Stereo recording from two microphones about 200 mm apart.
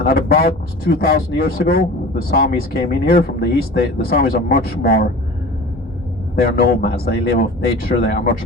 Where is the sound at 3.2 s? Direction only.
50° left (ahead or behind).